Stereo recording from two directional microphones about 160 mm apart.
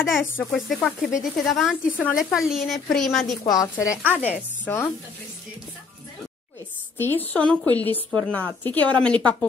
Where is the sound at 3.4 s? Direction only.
25° left (ahead or behind).